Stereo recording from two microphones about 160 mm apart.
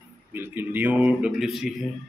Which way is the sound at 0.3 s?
15° right (ahead or behind).